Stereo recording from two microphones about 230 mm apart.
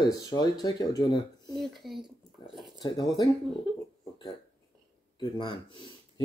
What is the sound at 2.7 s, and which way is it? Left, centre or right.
Speech, centre.